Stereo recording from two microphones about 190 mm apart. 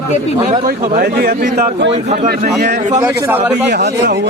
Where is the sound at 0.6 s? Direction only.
50° right (ahead or behind).